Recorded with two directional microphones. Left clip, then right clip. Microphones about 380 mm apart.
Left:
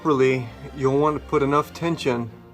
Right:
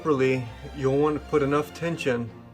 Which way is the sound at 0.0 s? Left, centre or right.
Centre.